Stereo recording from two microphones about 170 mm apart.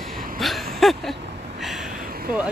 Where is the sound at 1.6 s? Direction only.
Centre (ahead or behind).